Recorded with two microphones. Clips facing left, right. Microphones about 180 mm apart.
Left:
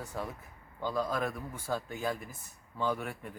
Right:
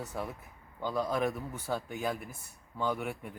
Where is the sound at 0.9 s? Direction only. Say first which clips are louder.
Right 2 dB; 15° right (ahead or behind).